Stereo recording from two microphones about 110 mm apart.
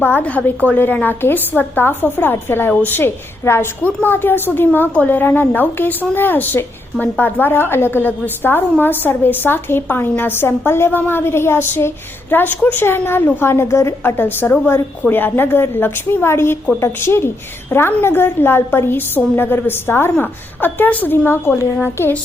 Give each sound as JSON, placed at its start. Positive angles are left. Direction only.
{"t": 0.0, "sound": "a woman's voice", "side_deg": 15}